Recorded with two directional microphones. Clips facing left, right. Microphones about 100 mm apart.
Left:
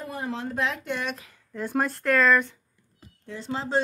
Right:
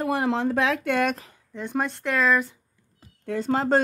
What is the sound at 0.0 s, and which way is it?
Speech, 80° right.